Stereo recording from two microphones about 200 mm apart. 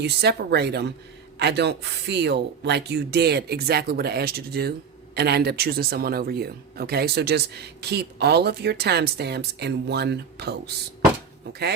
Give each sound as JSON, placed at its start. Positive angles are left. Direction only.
{"t": 0.0, "sound": "speech", "side_deg": -55}